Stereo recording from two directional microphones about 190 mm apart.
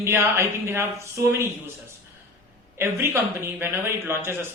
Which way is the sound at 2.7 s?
15° right (ahead or behind).